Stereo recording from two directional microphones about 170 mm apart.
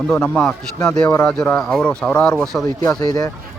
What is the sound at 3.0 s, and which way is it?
Speech, 20° left (ahead or behind).